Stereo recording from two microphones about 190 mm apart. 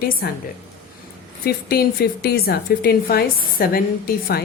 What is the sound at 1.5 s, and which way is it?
A woman's voice, 55° left (ahead or behind).